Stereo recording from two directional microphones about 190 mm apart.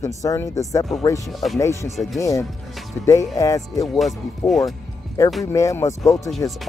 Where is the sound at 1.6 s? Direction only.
15° left (ahead or behind).